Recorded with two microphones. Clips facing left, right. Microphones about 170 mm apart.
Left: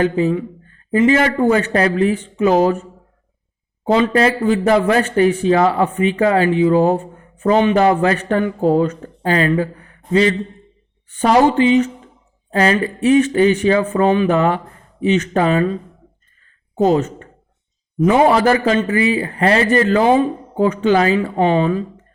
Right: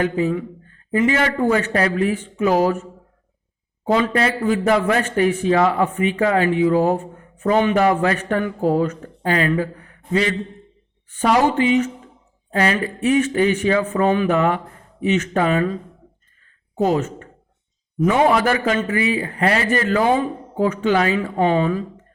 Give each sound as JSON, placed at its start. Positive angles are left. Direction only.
{"t": 0.0, "sound": "speech", "side_deg": 30}
{"t": 3.8, "sound": "speech", "side_deg": 25}
{"t": 11.2, "sound": "speech", "side_deg": 30}
{"t": 16.7, "sound": "speech", "side_deg": 30}
{"t": 20.7, "sound": "speech", "side_deg": 35}